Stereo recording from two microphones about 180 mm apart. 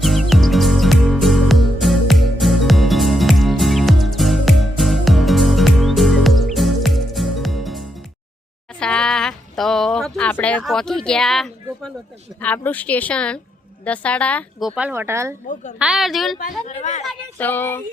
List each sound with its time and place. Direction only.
0.0 s music: centre (ahead or behind)
8.8 s a sound: 5° left (ahead or behind)
10.6 s a woman's voice: centre (ahead or behind)
14.8 s speech: 10° right (ahead or behind)
15.8 s speech: centre (ahead or behind)
16.6 s speech: 40° left (ahead or behind)
17.1 s a woman's voice: 10° left (ahead or behind)